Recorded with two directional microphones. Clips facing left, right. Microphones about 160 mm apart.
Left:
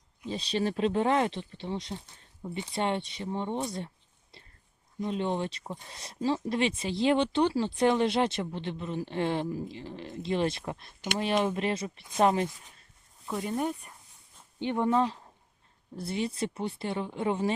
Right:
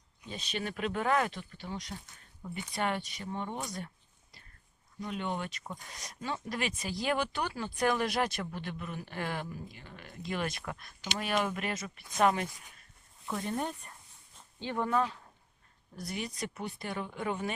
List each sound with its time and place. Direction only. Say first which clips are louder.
0.3 s speech: left 8 dB; 35° left (ahead or behind)
13.2 s speech: left 4 dB; 10° left (ahead or behind)
14.6 s speech: left 5 dB; 20° left (ahead or behind)